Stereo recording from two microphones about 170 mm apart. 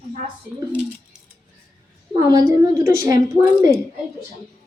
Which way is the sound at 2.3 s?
20° right (ahead or behind).